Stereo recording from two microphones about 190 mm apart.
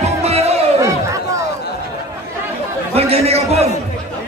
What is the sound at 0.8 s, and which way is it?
Chatter, 15° right (ahead or behind).